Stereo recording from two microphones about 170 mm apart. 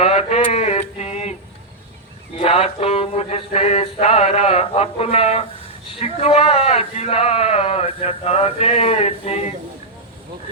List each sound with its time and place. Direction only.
0.0 s mantra: 40° left (ahead or behind)
2.4 s male singing: 35° left (ahead or behind)